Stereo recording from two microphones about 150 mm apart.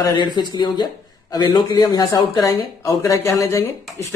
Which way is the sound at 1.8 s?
30° left (ahead or behind).